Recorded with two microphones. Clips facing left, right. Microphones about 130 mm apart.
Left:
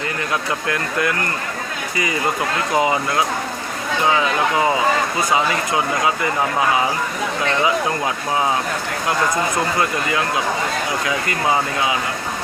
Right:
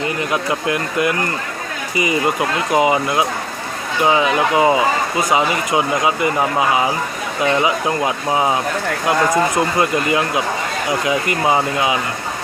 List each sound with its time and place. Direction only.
0.7 s speech: 20° right (ahead or behind)
2.7 s speech: 20° right (ahead or behind)